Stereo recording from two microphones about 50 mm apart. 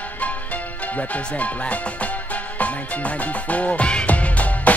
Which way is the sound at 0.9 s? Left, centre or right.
Left.